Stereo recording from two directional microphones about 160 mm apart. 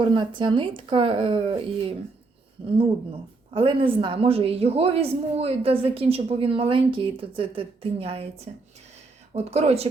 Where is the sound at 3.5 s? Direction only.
35° right (ahead or behind).